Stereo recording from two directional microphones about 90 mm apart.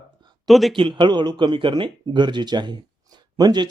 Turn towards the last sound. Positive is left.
turn(degrees=-55)  # may be behind; listen again after turning